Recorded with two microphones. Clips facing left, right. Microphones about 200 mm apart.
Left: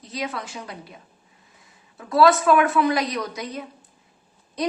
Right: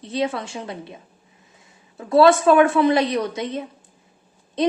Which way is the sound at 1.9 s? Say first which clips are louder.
Right 3 dB; 25° right (ahead or behind).